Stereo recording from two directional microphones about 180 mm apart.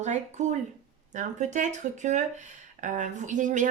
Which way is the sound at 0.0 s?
40° right (ahead or behind).